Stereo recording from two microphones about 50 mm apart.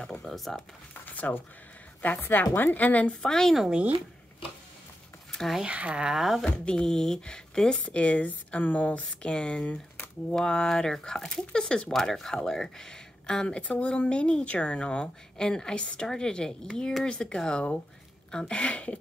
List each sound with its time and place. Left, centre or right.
0.2 s speech: centre
0.9 s a sound: left
2.0 s a woman's voice: left
3.1 s speech: centre
5.7 s speech: right
6.1 s speech: centre
6.4 s speech: centre
7.8 s speech: left
13.6 s speech: left